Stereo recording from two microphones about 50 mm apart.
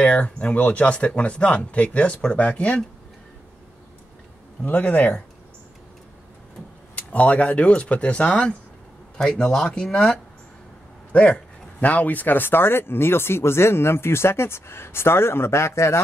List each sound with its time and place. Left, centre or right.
0.0 s speech: left
4.6 s speech: left
7.0 s speech: left
9.2 s speech: centre
11.1 s speech: left